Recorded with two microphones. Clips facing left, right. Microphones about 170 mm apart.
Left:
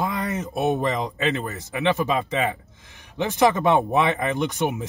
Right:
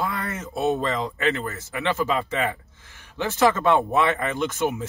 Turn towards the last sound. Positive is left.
turn(degrees=20)  # may be behind; listen again after turning